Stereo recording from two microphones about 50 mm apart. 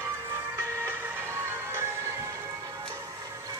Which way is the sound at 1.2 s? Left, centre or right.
Right.